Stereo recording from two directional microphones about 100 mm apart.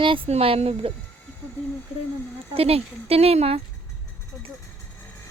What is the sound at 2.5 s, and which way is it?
Speech, 80° right.